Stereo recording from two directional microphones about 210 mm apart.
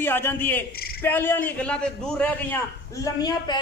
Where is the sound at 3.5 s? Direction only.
20° left (ahead or behind).